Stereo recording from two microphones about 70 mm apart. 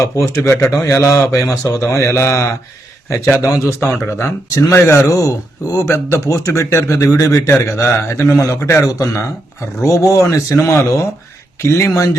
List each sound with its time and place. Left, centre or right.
0.4 s speech: left